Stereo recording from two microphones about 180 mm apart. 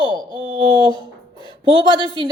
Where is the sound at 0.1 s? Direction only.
25° right (ahead or behind).